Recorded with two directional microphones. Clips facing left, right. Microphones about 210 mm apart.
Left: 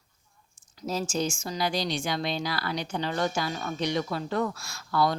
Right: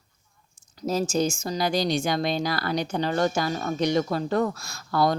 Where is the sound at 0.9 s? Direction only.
40° right (ahead or behind).